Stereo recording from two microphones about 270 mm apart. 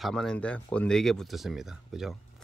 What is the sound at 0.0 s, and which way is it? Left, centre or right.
Speech, centre.